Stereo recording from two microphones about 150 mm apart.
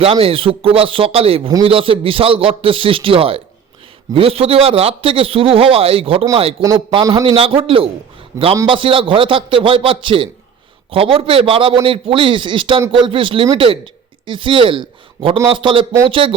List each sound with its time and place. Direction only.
0.0 s speech: 40° right (ahead or behind)